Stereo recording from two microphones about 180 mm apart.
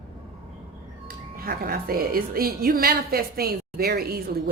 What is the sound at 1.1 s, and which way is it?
A woman's voice, 55° right (ahead or behind).